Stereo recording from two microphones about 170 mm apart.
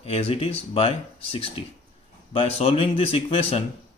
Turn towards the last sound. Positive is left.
turn(degrees=35)  # may be behind; listen again after turning